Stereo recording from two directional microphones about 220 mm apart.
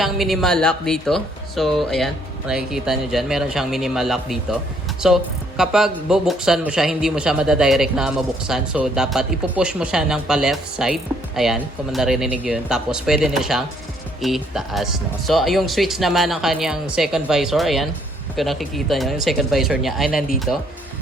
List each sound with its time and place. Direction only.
0.0 s speech: centre (ahead or behind)